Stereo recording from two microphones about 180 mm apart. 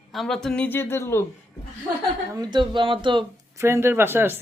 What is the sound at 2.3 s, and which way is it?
Speech, 20° right (ahead or behind).